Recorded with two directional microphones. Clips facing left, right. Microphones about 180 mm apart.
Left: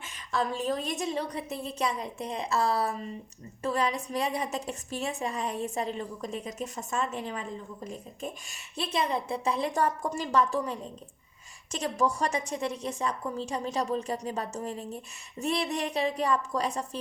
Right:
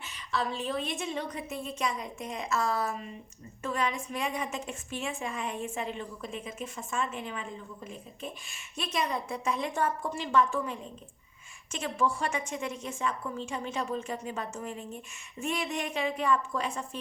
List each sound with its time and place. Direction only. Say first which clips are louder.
0.0 s a woman's voice: left 2 dB; 45° left (ahead or behind)